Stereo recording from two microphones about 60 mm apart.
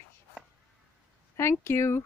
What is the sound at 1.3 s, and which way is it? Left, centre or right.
Speech, left.